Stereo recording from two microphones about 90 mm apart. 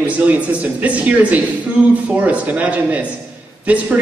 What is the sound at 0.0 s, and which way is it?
A man's voice, 15° right (ahead or behind).